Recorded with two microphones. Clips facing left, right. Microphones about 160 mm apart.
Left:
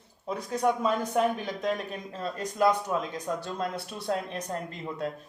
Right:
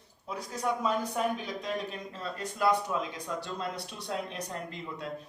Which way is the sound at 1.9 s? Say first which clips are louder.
Left 4 dB; 45° left (ahead or behind).